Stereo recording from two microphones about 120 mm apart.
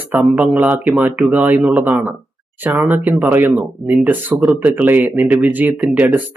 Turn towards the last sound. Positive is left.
turn(degrees=-10)  # may be behind; listen again after turning